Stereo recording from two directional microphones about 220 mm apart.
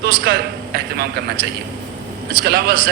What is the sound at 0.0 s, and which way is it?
A man's voice, 45° right (ahead or behind).